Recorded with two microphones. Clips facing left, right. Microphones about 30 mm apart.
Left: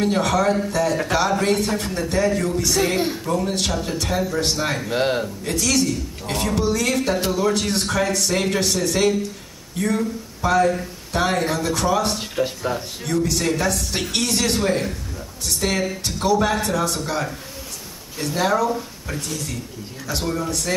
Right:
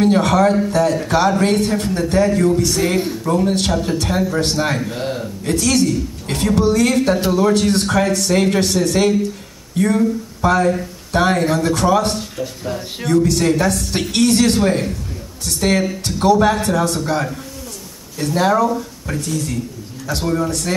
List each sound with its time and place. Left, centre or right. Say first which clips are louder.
0.0 s a woman's voice: right 5 dB; centre
4.9 s speech: left 3 dB; left
5.4 s a woman's voice: right 8 dB; centre
12.4 s speech: left 3 dB; left
13.0 s a woman's voice: right 7 dB; centre